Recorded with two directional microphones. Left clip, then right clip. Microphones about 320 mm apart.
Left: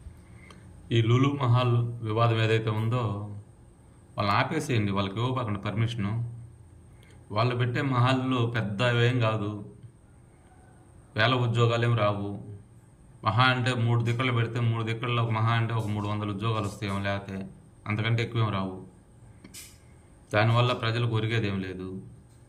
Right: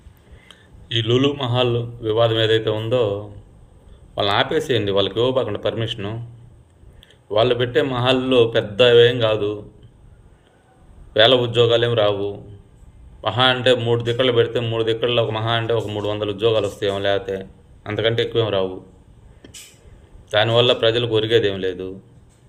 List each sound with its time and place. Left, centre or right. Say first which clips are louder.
0.4 s a sound: right 7 dB; centre
1.5 s a man's voice: right 9 dB; centre
4.5 s a man's voice: right 11 dB; centre
7.3 s a man's voice: right 12 dB; centre
11.1 s a man's voice: right 12 dB; centre
20.3 s a man's voice: right 10 dB; centre